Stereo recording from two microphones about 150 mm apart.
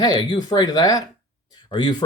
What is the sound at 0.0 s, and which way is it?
Speech, 30° left (ahead or behind).